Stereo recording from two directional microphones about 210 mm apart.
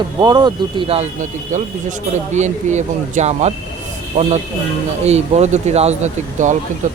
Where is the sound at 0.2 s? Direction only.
20° right (ahead or behind).